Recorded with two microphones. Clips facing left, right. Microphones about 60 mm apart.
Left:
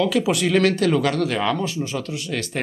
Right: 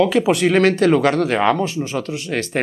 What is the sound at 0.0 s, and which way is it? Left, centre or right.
Speech, right.